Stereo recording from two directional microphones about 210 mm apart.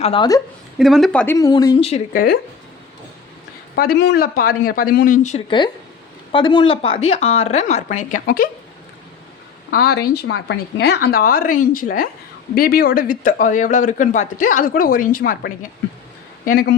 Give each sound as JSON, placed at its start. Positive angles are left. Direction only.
{"t": 0.0, "sound": "speech", "side_deg": 25}
{"t": 0.8, "sound": "speech", "side_deg": 0}
{"t": 2.1, "sound": "a woman's voice", "side_deg": 45}
{"t": 3.8, "sound": "a woman's voice", "side_deg": 45}
{"t": 5.5, "sound": "speech", "side_deg": 20}
{"t": 9.7, "sound": "a woman's voice", "side_deg": 50}